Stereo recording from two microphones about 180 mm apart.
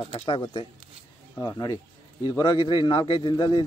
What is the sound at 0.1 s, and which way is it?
Speech, 35° left (ahead or behind).